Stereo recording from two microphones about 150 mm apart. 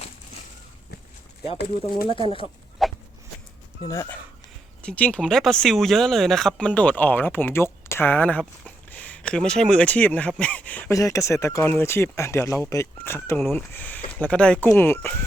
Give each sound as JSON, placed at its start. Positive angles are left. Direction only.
{"t": 2.8, "sound": "a sound", "side_deg": 0}
{"t": 3.8, "sound": "speech", "side_deg": 25}
{"t": 4.8, "sound": "speech", "side_deg": 10}
{"t": 10.9, "sound": "speech", "side_deg": 20}